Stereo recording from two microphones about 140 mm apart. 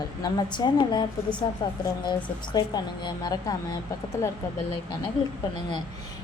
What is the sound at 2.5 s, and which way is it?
A woman's voice, 30° left (ahead or behind).